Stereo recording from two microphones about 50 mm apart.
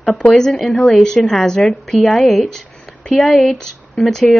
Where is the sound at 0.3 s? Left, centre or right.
Centre.